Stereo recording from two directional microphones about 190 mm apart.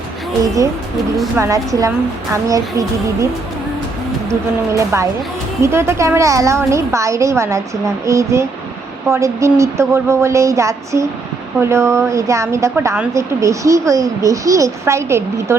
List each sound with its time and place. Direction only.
1.4 s a woman's voice: 15° right (ahead or behind)
4.8 s a woman's voice: 15° right (ahead or behind)